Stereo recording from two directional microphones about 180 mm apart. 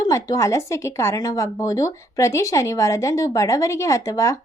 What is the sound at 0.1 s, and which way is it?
Speech, 15° left (ahead or behind).